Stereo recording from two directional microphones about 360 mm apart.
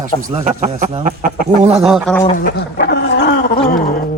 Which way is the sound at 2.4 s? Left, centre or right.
Left.